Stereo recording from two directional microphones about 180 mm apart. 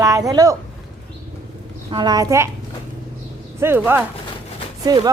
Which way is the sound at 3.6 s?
10° right (ahead or behind).